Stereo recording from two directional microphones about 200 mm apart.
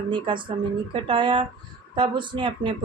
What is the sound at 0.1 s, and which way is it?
Speech, 25° right (ahead or behind).